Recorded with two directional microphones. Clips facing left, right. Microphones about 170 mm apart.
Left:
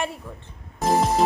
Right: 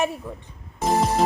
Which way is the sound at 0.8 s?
Centre (ahead or behind).